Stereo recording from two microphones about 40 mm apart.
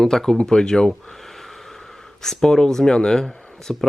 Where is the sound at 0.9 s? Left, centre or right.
Centre.